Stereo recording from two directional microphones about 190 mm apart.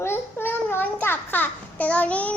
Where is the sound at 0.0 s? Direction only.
10° left (ahead or behind).